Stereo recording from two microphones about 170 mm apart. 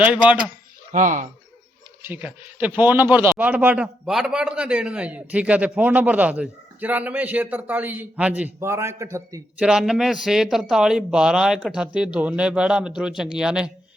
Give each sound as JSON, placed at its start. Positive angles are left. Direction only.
{"t": 0.0, "sound": "a man's voice", "side_deg": -10}
{"t": 0.9, "sound": "speech", "side_deg": -50}
{"t": 2.0, "sound": "a man's voice", "side_deg": -10}
{"t": 9.6, "sound": "a man's voice", "side_deg": -5}